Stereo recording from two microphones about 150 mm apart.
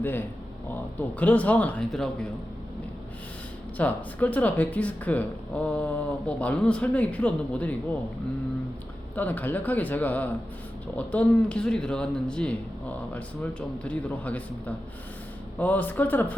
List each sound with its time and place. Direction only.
0.0 s speech: 15° left (ahead or behind)
3.8 s speech: 10° left (ahead or behind)
9.1 s speech: 10° left (ahead or behind)
15.5 s speech: 10° left (ahead or behind)